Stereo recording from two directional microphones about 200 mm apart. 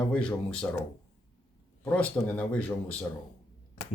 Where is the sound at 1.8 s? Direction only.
5° left (ahead or behind).